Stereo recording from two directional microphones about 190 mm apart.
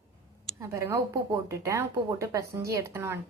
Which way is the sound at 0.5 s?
15° right (ahead or behind).